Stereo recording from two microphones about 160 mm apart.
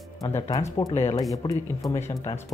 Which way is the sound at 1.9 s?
15° left (ahead or behind).